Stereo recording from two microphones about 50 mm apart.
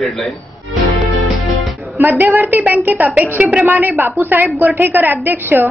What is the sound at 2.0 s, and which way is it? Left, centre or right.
A woman's voice, right.